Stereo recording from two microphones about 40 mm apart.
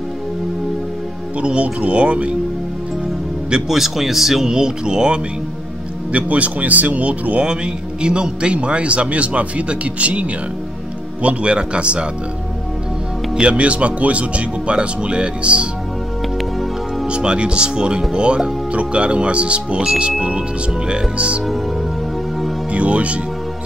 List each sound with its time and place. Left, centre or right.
1.4 s speech: right
3.6 s speech: centre
4.5 s speech: centre
6.1 s speech: right
11.2 s speech: right
13.4 s speech: right
17.1 s speech: right
22.7 s speech: right